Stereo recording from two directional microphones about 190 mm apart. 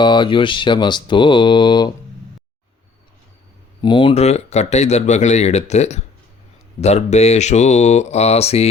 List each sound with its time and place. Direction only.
0.0 s speech: 25° left (ahead or behind)
3.8 s speech: 25° left (ahead or behind)